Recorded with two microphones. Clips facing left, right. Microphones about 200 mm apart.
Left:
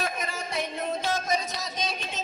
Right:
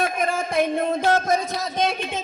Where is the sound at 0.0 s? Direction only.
50° right (ahead or behind).